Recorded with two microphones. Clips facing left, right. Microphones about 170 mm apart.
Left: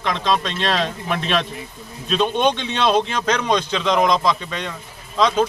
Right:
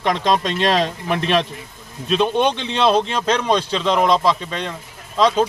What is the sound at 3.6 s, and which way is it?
Speech, 30° right (ahead or behind).